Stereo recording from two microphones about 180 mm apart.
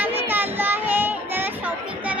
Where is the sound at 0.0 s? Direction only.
10° right (ahead or behind).